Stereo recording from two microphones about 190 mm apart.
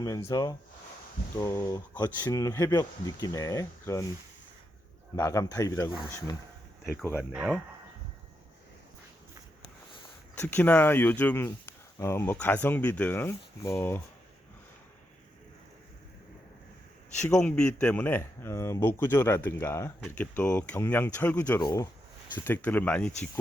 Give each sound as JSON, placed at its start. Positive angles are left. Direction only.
{"t": 0.3, "sound": "speech", "side_deg": 20}
{"t": 5.1, "sound": "speech", "side_deg": 15}
{"t": 7.0, "sound": "speech", "side_deg": 10}
{"t": 7.3, "sound": "speech", "side_deg": -5}
{"t": 10.3, "sound": "speech", "side_deg": 10}
{"t": 17.2, "sound": "speech", "side_deg": 5}
{"t": 21.6, "sound": "speech", "side_deg": 20}
{"t": 22.4, "sound": "speech", "side_deg": 10}